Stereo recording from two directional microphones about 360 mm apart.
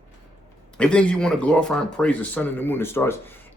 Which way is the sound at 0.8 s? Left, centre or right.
Centre.